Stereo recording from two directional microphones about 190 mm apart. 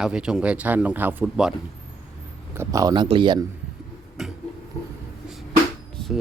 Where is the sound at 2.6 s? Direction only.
20° right (ahead or behind).